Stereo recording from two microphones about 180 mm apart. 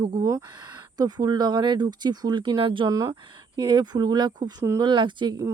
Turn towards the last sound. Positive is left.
turn(degrees=-20)  # may be behind; listen again after turning